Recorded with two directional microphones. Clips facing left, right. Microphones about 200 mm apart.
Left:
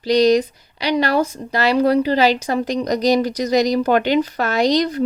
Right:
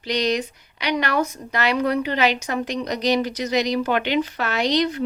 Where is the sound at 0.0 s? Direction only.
35° left (ahead or behind).